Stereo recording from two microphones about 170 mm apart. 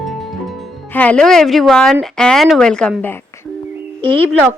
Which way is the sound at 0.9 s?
5° left (ahead or behind).